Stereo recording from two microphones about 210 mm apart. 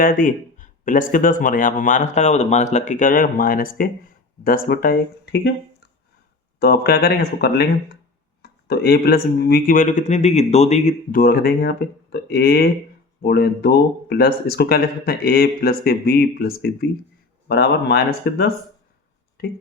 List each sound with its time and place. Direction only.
0.0 s speech: 40° left (ahead or behind)
6.6 s speech: 50° left (ahead or behind)